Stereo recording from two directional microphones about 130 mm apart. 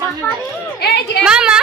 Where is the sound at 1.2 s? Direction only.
5° right (ahead or behind).